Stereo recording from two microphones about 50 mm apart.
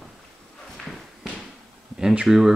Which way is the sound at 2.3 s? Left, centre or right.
Centre.